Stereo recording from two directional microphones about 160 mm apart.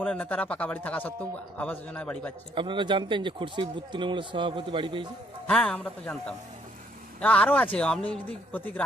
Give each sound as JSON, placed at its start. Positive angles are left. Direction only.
{"t": 0.1, "sound": "a man's voice", "side_deg": 10}
{"t": 2.6, "sound": "speech", "side_deg": -30}
{"t": 5.5, "sound": "a man's voice", "side_deg": 5}